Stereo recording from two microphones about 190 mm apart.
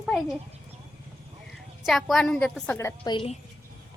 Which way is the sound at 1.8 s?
Centre (ahead or behind).